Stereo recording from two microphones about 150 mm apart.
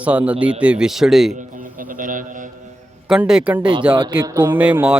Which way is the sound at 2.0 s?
60° right (ahead or behind).